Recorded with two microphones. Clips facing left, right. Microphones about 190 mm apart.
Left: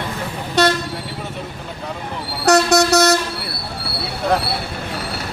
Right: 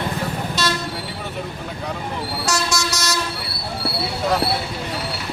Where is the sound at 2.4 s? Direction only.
60° left (ahead or behind).